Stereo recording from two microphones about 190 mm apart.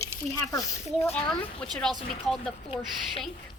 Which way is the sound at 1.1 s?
5° left (ahead or behind).